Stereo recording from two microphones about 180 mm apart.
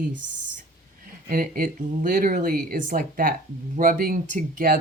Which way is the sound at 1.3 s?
55° right (ahead or behind).